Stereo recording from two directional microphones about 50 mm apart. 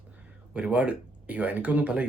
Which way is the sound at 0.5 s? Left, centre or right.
Right.